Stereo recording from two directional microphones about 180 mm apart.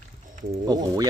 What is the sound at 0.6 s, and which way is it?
Speech, 20° right (ahead or behind).